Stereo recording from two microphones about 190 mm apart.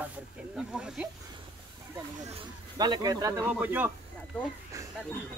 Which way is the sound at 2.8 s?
20° right (ahead or behind).